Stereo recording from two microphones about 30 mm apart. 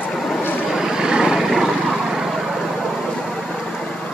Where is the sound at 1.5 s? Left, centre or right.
Centre.